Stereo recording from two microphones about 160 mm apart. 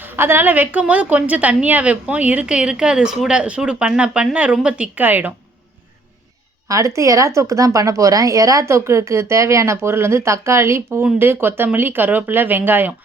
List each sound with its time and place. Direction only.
0.0 s a woman's voice: 15° right (ahead or behind)
6.7 s a woman's voice: 20° right (ahead or behind)